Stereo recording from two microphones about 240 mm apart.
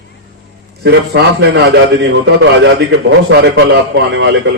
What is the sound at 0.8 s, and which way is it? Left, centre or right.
A man's voice, right.